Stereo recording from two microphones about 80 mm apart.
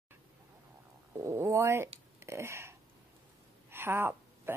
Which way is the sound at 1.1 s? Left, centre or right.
Right.